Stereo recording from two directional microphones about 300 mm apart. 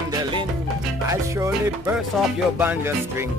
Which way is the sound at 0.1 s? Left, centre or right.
Centre.